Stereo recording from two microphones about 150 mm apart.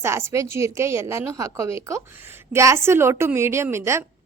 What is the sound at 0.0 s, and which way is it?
A woman's voice, 15° right (ahead or behind).